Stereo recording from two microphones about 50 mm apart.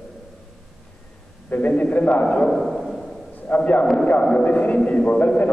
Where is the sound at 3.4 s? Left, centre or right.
Left.